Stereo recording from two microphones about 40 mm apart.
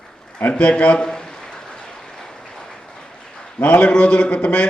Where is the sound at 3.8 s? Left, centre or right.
Left.